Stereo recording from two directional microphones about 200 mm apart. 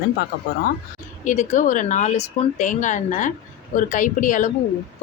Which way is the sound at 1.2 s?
35° left (ahead or behind).